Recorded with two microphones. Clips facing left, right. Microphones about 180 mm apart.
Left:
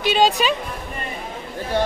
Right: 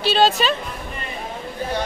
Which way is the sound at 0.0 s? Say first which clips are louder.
Even; 15° left (ahead or behind).